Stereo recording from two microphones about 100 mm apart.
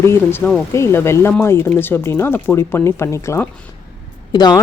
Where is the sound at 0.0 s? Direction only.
25° left (ahead or behind).